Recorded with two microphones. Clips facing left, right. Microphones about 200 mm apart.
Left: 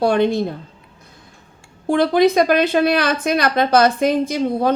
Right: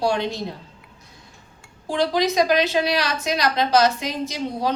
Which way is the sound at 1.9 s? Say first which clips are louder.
Left 7 dB; 55° left (ahead or behind).